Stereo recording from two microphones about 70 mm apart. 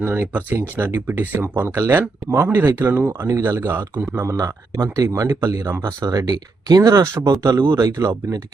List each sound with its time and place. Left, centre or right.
0.0 s a man's voice: right
3.1 s speech: right
3.4 s a man's voice: right
4.4 s speech: right
6.9 s speech: right